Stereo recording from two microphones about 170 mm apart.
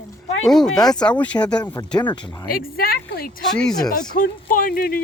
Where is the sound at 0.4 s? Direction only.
5° left (ahead or behind).